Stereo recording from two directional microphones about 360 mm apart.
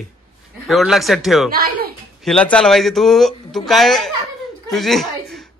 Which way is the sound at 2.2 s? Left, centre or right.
Centre.